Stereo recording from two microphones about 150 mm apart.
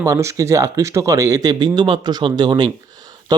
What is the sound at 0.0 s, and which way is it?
Speech, 20° right (ahead or behind).